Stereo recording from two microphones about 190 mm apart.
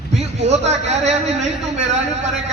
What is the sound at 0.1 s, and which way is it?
A man's voice, 35° right (ahead or behind).